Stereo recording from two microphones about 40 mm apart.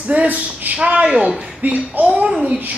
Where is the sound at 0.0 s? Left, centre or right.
Right.